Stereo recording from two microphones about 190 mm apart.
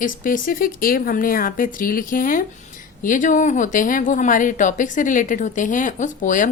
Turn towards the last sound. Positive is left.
turn(degrees=45)  # may be behind; listen again after turning